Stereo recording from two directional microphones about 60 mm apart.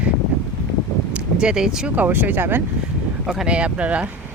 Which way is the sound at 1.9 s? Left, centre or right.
Right.